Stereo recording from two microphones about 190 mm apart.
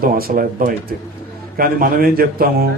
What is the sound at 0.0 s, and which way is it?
A man's voice, 50° right (ahead or behind).